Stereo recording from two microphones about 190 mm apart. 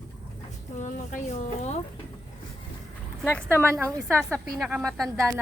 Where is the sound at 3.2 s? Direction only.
10° left (ahead or behind).